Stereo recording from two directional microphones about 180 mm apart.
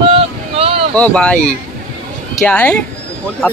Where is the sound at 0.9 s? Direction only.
5° left (ahead or behind).